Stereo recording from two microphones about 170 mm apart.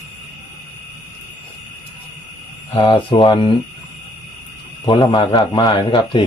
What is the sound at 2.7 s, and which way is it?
Speech, 30° left (ahead or behind).